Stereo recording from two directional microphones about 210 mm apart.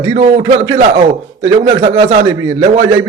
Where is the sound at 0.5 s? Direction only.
20° right (ahead or behind).